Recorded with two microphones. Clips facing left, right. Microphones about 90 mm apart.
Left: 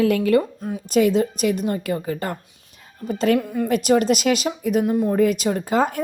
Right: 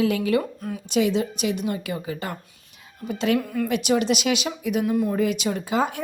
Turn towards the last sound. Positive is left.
turn(degrees=45)  # may be behind; listen again after turning